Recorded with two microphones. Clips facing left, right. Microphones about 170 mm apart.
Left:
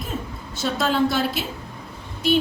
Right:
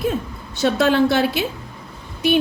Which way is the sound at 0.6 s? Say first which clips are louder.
Right 6 dB; 70° right (ahead or behind).